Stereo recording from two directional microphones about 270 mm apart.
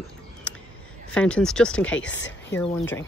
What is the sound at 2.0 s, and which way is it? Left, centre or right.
Speech, left.